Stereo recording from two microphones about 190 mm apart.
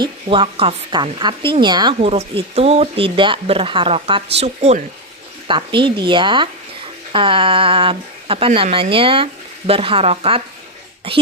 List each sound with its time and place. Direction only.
0.0 s speech: 25° right (ahead or behind)
2.0 s speech: 35° right (ahead or behind)